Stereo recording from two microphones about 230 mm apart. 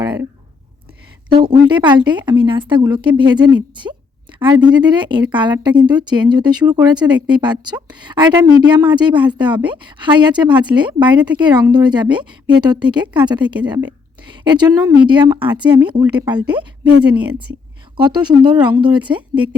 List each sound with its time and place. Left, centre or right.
1.3 s speech: centre
17.9 s speech: centre